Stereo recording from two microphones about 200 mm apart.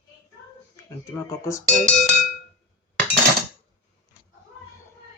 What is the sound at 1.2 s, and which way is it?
Speech, 15° left (ahead or behind).